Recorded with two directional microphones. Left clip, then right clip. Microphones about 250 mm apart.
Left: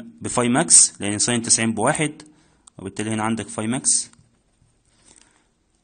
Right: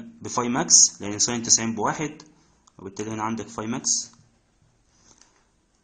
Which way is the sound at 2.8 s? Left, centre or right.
Left.